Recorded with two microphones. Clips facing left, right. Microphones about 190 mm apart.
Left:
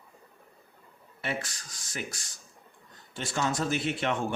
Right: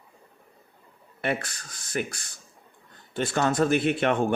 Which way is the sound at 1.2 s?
60° right (ahead or behind).